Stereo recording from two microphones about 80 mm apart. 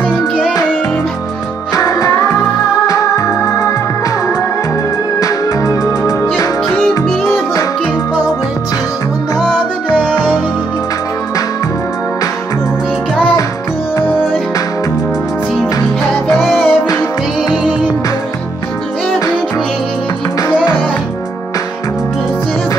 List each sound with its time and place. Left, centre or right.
1.7 s music: left
5.2 s music: left
16.4 s music: centre